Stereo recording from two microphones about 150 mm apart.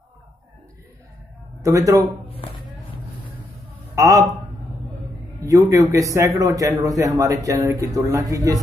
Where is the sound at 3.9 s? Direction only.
20° right (ahead or behind).